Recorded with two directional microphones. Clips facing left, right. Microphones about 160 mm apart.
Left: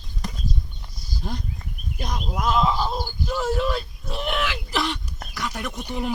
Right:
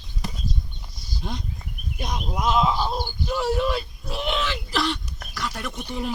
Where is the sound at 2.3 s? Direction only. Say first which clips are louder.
Even; centre (ahead or behind).